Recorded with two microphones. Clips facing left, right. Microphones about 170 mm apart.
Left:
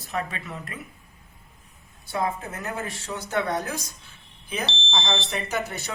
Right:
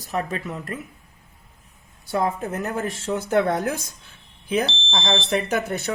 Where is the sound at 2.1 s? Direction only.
40° right (ahead or behind).